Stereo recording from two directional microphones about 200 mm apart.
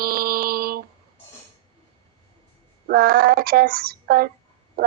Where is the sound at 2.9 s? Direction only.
50° right (ahead or behind).